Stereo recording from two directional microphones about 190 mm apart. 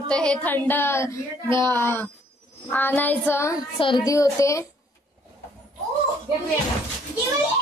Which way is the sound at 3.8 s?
25° left (ahead or behind).